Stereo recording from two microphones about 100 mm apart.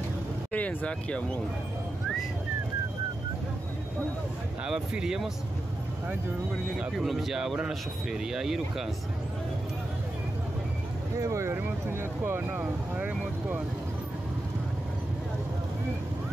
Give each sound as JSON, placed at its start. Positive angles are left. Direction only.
{"t": 0.5, "sound": "speech", "side_deg": 15}
{"t": 4.6, "sound": "speech", "side_deg": -5}
{"t": 6.8, "sound": "speech", "side_deg": 0}
{"t": 11.1, "sound": "speech", "side_deg": -30}